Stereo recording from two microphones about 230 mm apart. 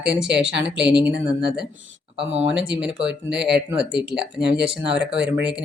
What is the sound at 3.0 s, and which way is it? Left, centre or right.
Speech, right.